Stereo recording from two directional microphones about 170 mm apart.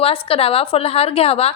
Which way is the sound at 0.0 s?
35° left (ahead or behind).